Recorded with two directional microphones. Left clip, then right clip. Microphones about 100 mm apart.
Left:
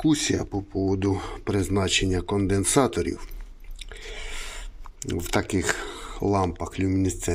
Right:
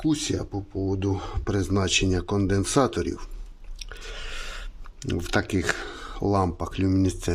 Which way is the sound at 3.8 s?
35° right (ahead or behind).